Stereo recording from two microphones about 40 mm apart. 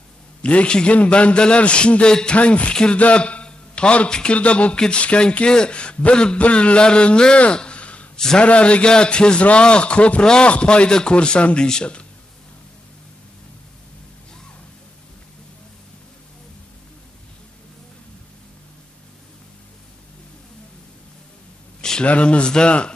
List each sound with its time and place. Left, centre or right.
0.4 s a man's voice: left
2.7 s a man's voice: centre
3.0 s a sound: left
4.1 s a man's voice: left
4.4 s speech: left
4.7 s a man's voice: left
10.2 s a man's voice: centre
22.0 s a man's voice: left